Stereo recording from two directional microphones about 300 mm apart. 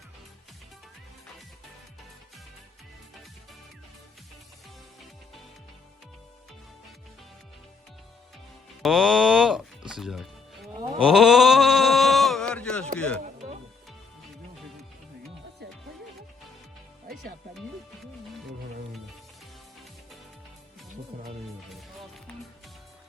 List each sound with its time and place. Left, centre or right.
8.8 s a sound: centre
9.9 s music: centre
11.0 s sheep: centre
13.0 s speech: centre
13.2 s music: right
21.1 s music: right